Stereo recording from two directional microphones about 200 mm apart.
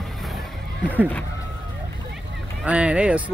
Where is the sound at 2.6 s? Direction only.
5° right (ahead or behind).